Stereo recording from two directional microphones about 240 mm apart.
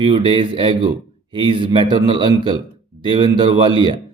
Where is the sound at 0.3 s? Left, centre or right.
Right.